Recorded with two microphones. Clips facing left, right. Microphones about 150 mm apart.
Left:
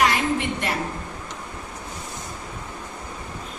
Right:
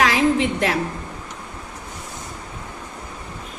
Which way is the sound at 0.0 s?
90° right.